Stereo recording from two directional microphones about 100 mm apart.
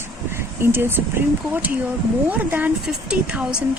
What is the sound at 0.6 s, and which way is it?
Speech, 25° right (ahead or behind).